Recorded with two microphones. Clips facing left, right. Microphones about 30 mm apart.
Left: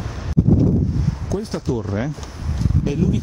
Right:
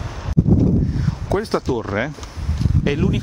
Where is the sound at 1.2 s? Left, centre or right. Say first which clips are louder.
Right 5 dB; right.